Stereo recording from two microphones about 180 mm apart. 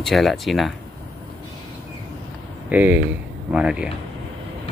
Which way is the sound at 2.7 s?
10° right (ahead or behind).